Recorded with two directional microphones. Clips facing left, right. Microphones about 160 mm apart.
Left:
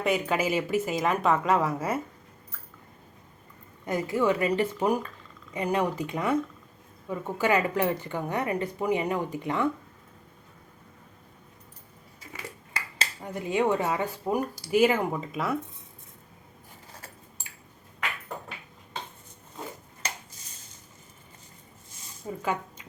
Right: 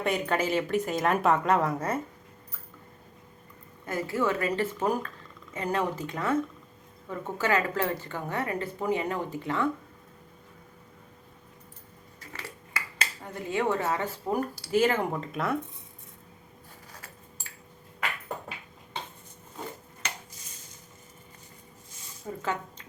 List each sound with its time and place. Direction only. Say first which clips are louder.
0.0 s speech: left 1 dB; 5° left (ahead or behind)
3.8 s speech: left 3 dB; 20° left (ahead or behind)
13.0 s speech: left 3 dB; 20° left (ahead or behind); by 15.5 s centre (ahead or behind)
20.0 s a sound: left 1 dB; 35° left (ahead or behind)
22.3 s speech: left 1 dB; 15° left (ahead or behind)